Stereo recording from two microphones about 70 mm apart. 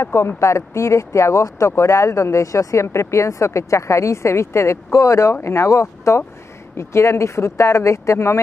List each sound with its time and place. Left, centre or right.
0.0 s speech: left